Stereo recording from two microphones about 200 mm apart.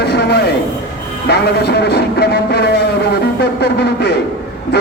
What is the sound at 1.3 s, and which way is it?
Music, 55° left (ahead or behind).